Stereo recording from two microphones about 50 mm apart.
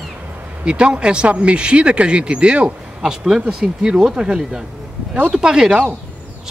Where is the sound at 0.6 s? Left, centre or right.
Centre.